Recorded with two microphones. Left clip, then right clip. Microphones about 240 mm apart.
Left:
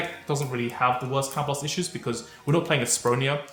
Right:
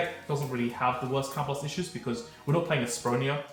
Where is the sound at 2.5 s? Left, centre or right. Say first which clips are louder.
Left 4 dB; left.